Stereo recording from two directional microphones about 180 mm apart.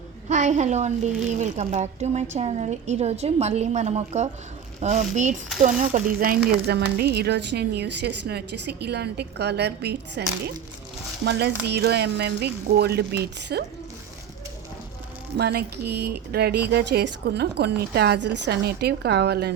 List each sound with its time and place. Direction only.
0.3 s a woman's voice: 40° right (ahead or behind)
6.7 s a woman's voice: 65° right (ahead or behind)
15.4 s speech: 65° right (ahead or behind)